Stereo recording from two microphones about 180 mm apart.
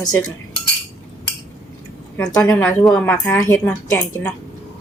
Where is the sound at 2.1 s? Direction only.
20° left (ahead or behind).